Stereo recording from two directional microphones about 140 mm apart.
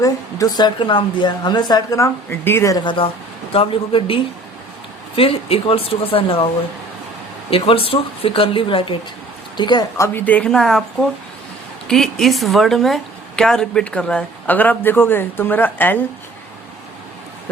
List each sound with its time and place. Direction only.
0.0 s a woman's voice: 25° left (ahead or behind)
7.5 s speech: 40° left (ahead or behind)
10.0 s a woman's voice: 15° left (ahead or behind)